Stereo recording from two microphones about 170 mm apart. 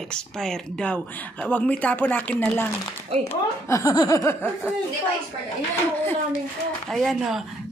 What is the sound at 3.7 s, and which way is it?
Speech, 20° left (ahead or behind).